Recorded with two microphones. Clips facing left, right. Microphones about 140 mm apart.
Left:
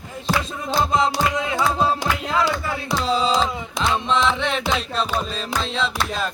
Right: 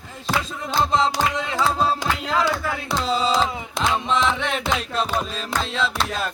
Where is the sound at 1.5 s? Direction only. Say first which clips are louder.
Left 1 dB; 10° left (ahead or behind).